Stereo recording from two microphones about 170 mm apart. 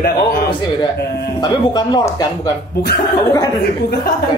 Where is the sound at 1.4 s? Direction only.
25° left (ahead or behind).